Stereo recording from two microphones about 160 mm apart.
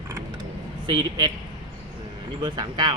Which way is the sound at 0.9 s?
30° right (ahead or behind).